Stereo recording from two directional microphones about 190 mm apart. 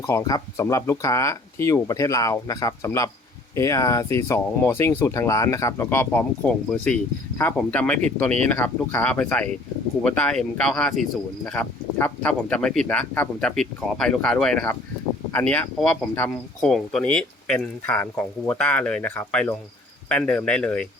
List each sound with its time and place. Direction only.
0.0 s speech: 15° left (ahead or behind)